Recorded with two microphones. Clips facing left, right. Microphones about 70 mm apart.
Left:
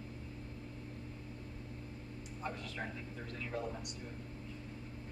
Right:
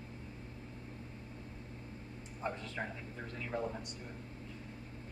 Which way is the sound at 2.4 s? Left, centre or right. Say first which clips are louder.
Right 3 dB; right.